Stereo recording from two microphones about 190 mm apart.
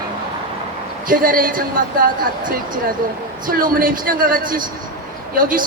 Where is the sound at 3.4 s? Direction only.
45° right (ahead or behind).